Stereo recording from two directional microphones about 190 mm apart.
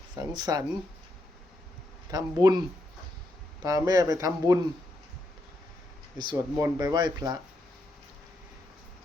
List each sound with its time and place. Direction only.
0.2 s speech: 20° right (ahead or behind)
2.0 s speech: 20° right (ahead or behind)
6.1 s speech: 20° right (ahead or behind)